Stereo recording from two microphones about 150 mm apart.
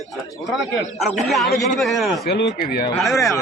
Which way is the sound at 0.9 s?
Centre (ahead or behind).